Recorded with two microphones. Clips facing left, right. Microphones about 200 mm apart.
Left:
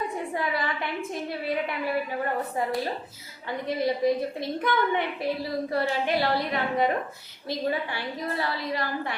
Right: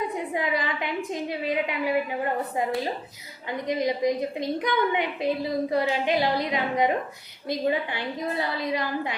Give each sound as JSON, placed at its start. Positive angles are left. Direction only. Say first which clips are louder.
{"t": 0.3, "sound": "a woman's voice", "louder": "right 2 dB", "side_deg": -20}
{"t": 3.7, "sound": "a woman's voice", "louder": "even", "side_deg": -15}